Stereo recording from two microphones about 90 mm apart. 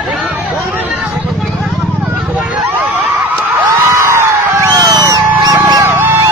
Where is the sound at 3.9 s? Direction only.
30° right (ahead or behind).